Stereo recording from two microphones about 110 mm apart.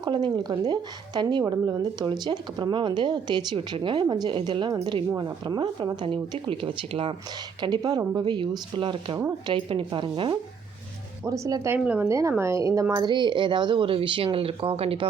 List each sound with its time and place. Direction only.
0.0 s speech: 40° right (ahead or behind)
6.0 s speech: 50° right (ahead or behind)
7.6 s speech: 40° right (ahead or behind)
11.3 s speech: 30° right (ahead or behind)
11.7 s a woman's voice: 20° right (ahead or behind)
12.9 s speech: 40° right (ahead or behind); by 15.0 s 55° right (ahead or behind)